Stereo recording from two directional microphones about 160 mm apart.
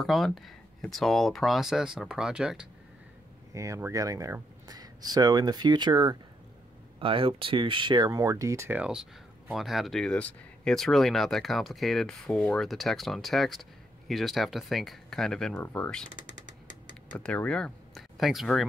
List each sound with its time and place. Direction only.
0.0 s speech: centre (ahead or behind)
3.5 s speech: 20° right (ahead or behind); by 16.1 s 5° left (ahead or behind)
17.1 s speech: 5° left (ahead or behind)